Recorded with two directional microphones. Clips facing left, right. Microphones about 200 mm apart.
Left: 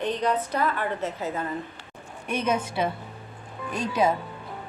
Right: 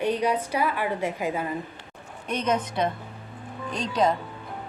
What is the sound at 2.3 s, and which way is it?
A woman's voice, 10° left (ahead or behind).